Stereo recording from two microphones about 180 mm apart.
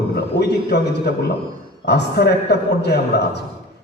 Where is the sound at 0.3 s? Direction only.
65° left (ahead or behind).